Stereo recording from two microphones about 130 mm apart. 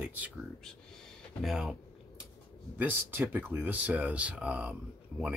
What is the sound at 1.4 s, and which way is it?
Speech, 5° right (ahead or behind).